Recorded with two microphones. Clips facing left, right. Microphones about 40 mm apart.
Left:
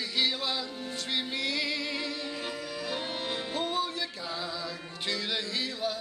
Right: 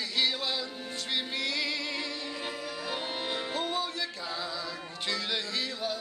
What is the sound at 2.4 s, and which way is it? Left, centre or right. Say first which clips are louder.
Music: even; centre.